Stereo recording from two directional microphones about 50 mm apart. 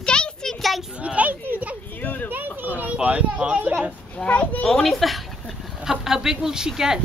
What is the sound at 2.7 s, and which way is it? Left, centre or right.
Speech, right.